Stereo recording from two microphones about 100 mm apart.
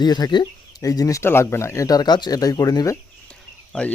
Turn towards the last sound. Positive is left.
turn(degrees=10)  # may be behind; listen again after turning